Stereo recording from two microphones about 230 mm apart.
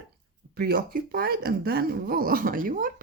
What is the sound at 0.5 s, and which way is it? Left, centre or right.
Speech, right.